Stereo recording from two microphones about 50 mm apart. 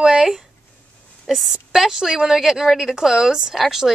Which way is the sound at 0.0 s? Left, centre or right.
Centre.